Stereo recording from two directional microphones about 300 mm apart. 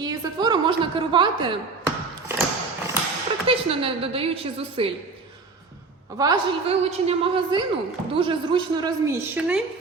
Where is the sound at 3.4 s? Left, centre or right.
Centre.